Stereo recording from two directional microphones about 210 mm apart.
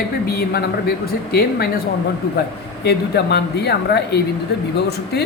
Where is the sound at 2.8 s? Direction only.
50° left (ahead or behind).